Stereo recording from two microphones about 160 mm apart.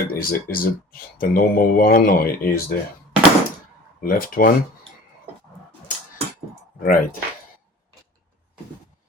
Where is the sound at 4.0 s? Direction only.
60° left (ahead or behind).